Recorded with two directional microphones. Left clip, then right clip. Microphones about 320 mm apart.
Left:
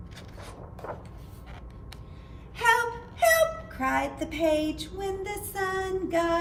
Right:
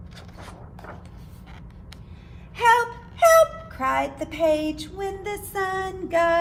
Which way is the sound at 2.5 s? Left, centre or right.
Right.